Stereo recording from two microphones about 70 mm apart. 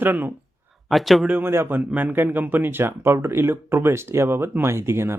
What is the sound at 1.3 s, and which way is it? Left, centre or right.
Speech, right.